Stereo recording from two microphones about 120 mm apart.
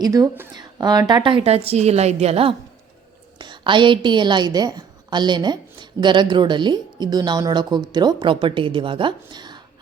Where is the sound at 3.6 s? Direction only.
40° right (ahead or behind).